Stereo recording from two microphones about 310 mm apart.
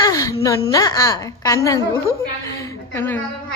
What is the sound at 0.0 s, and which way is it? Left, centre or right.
Whimper, centre.